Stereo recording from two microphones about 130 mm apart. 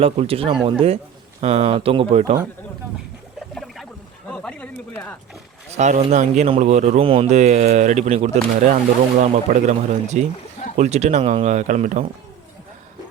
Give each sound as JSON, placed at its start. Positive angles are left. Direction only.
{"t": 0.0, "sound": "speech", "side_deg": -50}
{"t": 3.5, "sound": "a sound", "side_deg": 0}
{"t": 5.7, "sound": "speech", "side_deg": -60}
{"t": 7.0, "sound": "speech", "side_deg": -45}
{"t": 7.3, "sound": "speech", "side_deg": -60}
{"t": 8.6, "sound": "speech", "side_deg": -70}